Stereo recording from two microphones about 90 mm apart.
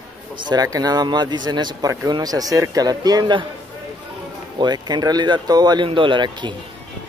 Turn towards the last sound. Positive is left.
turn(degrees=-60)  # may be behind; listen again after turning